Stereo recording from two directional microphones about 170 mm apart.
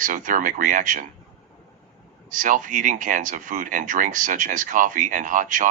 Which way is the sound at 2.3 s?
50° right (ahead or behind).